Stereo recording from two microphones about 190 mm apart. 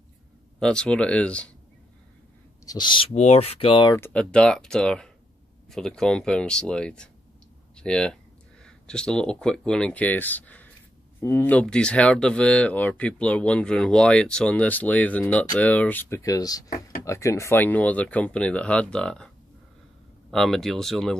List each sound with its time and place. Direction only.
0.6 s speech: 5° left (ahead or behind)
2.6 s speech: 20° left (ahead or behind)
3.9 s speech: 10° left (ahead or behind)